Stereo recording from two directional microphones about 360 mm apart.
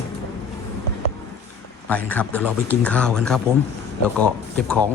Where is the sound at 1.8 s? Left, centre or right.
Centre.